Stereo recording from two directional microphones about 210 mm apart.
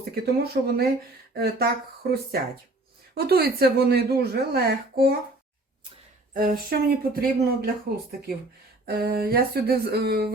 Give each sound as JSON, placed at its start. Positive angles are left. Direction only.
{"t": 0.1, "sound": "a woman's voice", "side_deg": -50}
{"t": 6.3, "sound": "a woman's voice", "side_deg": -45}
{"t": 8.9, "sound": "a woman's voice", "side_deg": -50}